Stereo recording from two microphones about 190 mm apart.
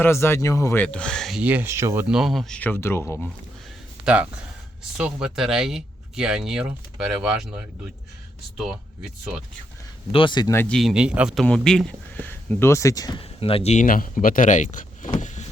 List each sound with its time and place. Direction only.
0.0 s speech: 15° left (ahead or behind); by 2.0 s 15° right (ahead or behind)
2.0 s speech: centre (ahead or behind)
4.0 s speech: 5° right (ahead or behind)
10.1 s speech: 25° left (ahead or behind)
10.8 s speech: 5° right (ahead or behind); by 13.2 s 20° left (ahead or behind)
13.4 s speech: 30° left (ahead or behind)